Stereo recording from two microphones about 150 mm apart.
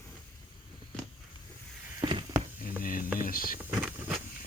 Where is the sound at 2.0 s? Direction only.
30° right (ahead or behind).